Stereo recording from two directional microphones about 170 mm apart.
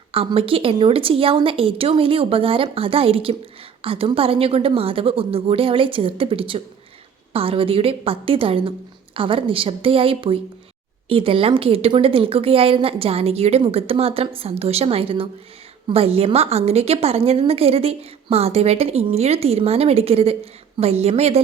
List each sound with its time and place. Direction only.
0.1 s a woman's voice: 35° right (ahead or behind)